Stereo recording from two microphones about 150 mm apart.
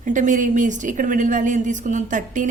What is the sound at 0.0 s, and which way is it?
A woman's voice, 55° right (ahead or behind).